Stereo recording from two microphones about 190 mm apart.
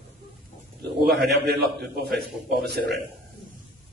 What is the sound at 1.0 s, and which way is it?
A man's voice, 60° right (ahead or behind).